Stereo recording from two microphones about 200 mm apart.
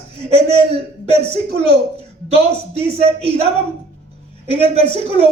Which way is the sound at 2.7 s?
30° right (ahead or behind).